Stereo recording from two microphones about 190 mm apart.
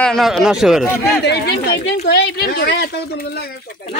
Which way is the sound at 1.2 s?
60° left (ahead or behind).